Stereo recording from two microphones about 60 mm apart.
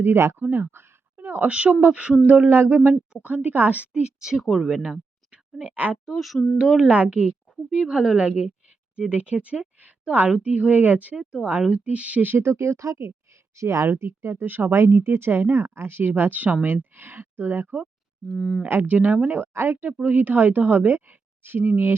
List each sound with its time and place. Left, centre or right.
0.0 s speech: right
2.9 s speech: centre
4.4 s a woman's voice: centre
5.3 s a sound: centre
5.6 s speech: right
6.1 s a woman's voice: centre
6.8 s speech: right
7.3 s a woman's voice: centre; by 12.4 s right
12.4 s speech: right
13.3 s a sound: right
13.9 s speech: right
18.3 s speech: centre
18.9 s speech: right
19.4 s speech: right